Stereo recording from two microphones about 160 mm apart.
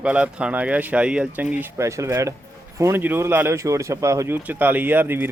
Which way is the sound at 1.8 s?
20° right (ahead or behind).